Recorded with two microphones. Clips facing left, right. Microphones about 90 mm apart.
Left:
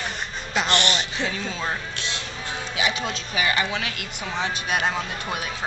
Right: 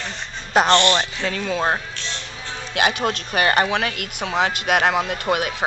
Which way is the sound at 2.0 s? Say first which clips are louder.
Even; 15° left (ahead or behind).